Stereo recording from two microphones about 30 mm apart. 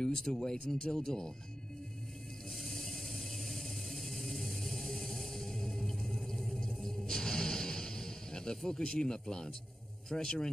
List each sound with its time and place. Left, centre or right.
0.0 s speech: centre
2.5 s vehicle: centre
6.3 s music: centre
6.6 s music: centre
10.0 s speech: left